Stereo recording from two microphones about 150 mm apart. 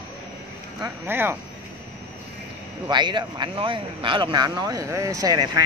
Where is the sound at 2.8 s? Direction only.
30° right (ahead or behind).